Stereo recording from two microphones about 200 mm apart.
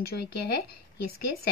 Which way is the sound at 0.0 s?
50° left (ahead or behind).